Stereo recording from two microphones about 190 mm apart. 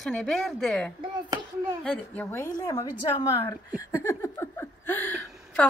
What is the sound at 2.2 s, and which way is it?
A woman's voice, 15° left (ahead or behind).